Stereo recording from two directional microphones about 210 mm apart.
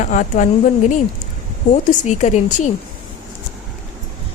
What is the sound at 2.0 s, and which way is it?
Speech, 35° left (ahead or behind).